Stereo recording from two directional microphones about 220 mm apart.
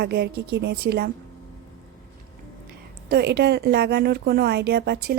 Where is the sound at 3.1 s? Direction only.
45° right (ahead or behind).